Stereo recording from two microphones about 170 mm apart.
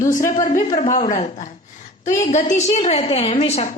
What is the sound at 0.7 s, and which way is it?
A woman's voice, 45° left (ahead or behind).